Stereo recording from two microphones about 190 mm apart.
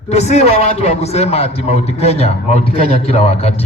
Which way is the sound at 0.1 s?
35° left (ahead or behind).